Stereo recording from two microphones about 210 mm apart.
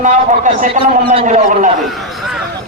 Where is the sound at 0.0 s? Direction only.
35° right (ahead or behind).